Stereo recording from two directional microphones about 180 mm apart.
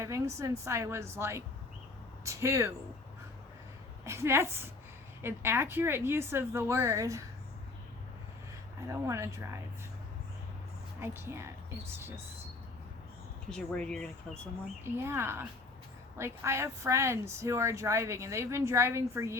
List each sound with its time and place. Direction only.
0.0 s speech: 15° right (ahead or behind)
4.0 s speech: 15° right (ahead or behind)
8.9 s speech: 15° right (ahead or behind)
11.0 s speech: 15° right (ahead or behind)
13.5 s speech: 5° left (ahead or behind)
14.8 s speech: 15° right (ahead or behind)